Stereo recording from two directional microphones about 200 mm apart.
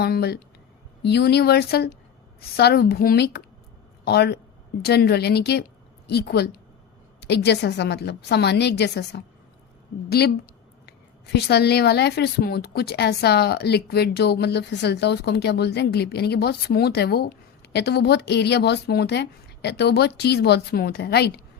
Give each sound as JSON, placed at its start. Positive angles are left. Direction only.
{"t": 0.0, "sound": "a woman's voice", "side_deg": 55}